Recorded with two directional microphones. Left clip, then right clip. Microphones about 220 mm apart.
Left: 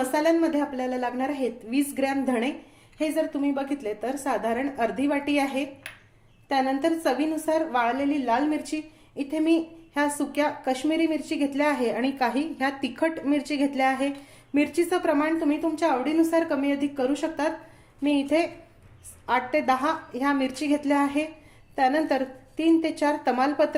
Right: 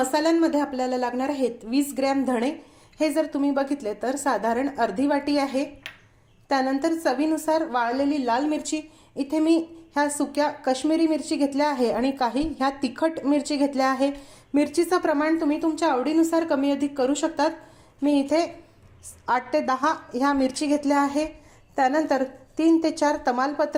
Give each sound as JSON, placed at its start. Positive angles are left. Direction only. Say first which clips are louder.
{"t": 0.0, "sound": "a woman's voice", "louder": "right 1 dB", "side_deg": -20}